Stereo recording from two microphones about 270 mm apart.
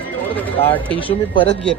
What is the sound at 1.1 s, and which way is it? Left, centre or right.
Speech, centre.